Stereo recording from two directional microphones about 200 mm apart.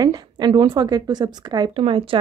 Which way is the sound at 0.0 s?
20° right (ahead or behind).